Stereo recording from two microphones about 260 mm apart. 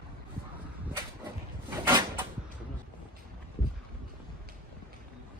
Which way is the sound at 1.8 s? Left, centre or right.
Centre.